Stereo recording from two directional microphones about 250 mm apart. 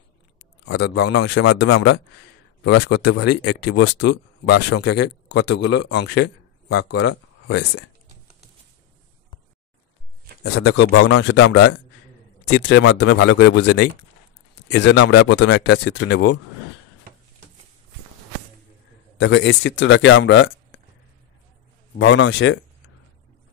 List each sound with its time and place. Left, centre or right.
0.7 s speech: left
10.4 s speech: left
11.3 s speech: left
12.4 s speech: left
19.1 s speech: left
21.9 s speech: left